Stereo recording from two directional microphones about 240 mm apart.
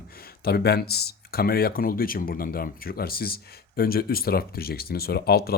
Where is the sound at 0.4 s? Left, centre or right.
Left.